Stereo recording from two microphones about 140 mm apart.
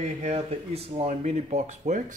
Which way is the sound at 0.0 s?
50° right (ahead or behind).